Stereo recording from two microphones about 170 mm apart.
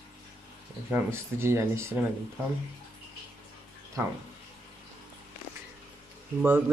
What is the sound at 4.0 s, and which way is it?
Speech, 15° right (ahead or behind).